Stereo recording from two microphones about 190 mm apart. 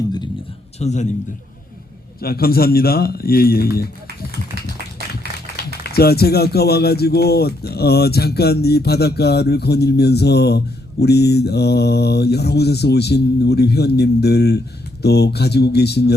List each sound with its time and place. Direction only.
0.8 s a man's voice: 35° left (ahead or behind)
2.2 s speech: 55° left (ahead or behind)
5.9 s speech: 55° left (ahead or behind)